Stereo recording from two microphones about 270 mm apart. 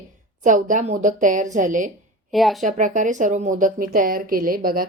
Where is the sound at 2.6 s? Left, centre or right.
Right.